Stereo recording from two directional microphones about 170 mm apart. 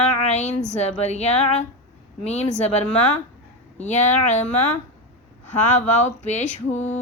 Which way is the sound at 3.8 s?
45° left (ahead or behind).